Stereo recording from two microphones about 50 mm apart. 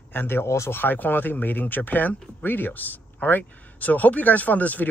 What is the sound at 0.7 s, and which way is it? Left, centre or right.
Speech, left.